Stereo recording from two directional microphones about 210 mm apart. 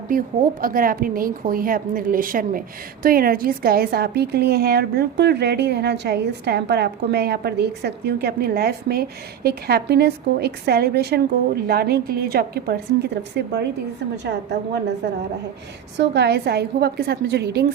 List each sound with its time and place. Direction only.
0.6 s a woman's voice: 40° right (ahead or behind)
16.0 s a woman's voice: 55° right (ahead or behind)